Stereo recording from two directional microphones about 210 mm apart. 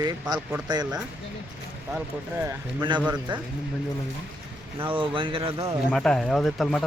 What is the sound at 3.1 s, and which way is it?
Speech, 20° right (ahead or behind).